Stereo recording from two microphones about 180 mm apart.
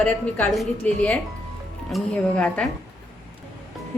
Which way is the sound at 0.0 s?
Centre (ahead or behind).